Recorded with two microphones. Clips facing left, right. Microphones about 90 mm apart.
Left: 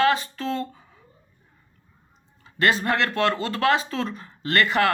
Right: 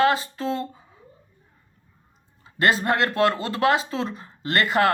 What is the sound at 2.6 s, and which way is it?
Speech, 30° right (ahead or behind).